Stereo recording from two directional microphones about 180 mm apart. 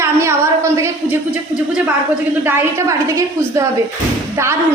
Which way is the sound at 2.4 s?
15° right (ahead or behind).